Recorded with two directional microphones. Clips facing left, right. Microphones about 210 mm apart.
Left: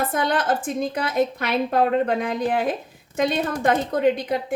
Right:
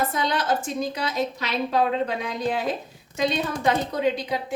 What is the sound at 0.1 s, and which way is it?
A woman's voice, 55° left (ahead or behind).